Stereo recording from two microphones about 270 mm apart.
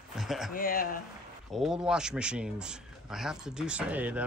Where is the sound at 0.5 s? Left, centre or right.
Left.